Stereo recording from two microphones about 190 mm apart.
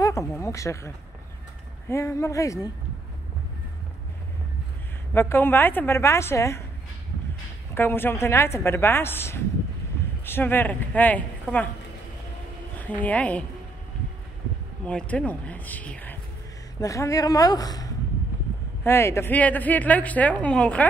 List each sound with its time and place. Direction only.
0.0 s a sound: 15° left (ahead or behind)
0.4 s a woman's voice: 15° left (ahead or behind)
5.1 s a woman's voice: 10° left (ahead or behind)
7.7 s a woman's voice: 10° left (ahead or behind)
12.8 s a woman's voice: 10° left (ahead or behind)
14.9 s a woman's voice: 5° left (ahead or behind)